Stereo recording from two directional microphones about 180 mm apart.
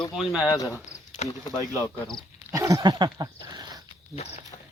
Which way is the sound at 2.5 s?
20° right (ahead or behind).